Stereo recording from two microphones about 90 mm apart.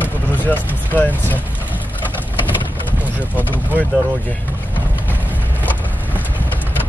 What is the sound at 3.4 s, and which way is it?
Speech, 20° left (ahead or behind).